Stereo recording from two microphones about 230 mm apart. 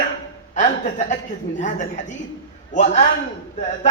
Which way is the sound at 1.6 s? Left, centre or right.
Left.